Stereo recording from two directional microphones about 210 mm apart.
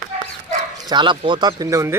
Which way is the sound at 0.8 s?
20° right (ahead or behind).